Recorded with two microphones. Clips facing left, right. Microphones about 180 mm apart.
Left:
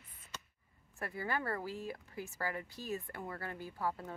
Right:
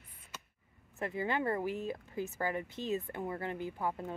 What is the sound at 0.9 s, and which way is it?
Speech, 20° right (ahead or behind).